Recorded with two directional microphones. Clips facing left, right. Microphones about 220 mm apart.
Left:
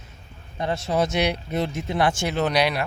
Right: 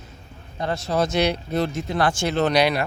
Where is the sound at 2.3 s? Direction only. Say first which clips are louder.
Right 5 dB; 5° left (ahead or behind).